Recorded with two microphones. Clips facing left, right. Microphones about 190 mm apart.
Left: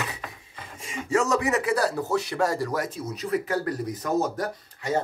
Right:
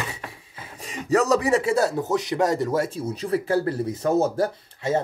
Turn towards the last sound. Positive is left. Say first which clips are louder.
# right 3 dB
turn(degrees=-25)  # may be behind; listen again after turning